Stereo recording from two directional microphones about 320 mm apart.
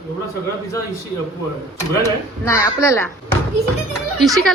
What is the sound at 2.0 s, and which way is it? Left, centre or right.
Speech, centre.